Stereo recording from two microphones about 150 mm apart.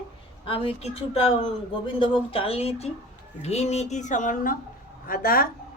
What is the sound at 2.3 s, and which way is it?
Speech, 40° left (ahead or behind).